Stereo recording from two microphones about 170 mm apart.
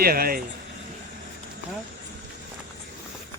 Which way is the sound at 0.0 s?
60° right (ahead or behind).